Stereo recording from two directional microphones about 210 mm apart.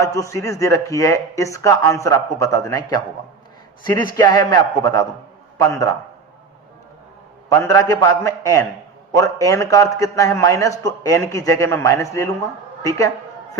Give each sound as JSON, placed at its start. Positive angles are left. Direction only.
{"t": 0.0, "sound": "a man's voice", "side_deg": 15}
{"t": 4.1, "sound": "a man's voice", "side_deg": 20}
{"t": 7.6, "sound": "a man's voice", "side_deg": 15}